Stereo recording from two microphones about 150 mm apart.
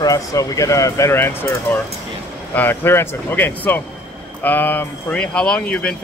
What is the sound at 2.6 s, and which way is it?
Speech, 15° left (ahead or behind).